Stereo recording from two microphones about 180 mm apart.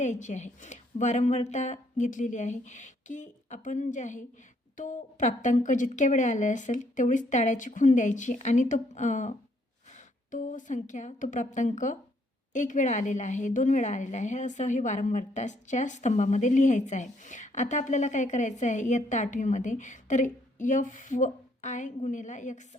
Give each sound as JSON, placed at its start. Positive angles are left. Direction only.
{"t": 0.0, "sound": "a woman's voice", "side_deg": 40}